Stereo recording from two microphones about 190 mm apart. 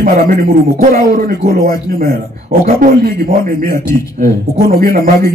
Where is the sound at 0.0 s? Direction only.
50° right (ahead or behind).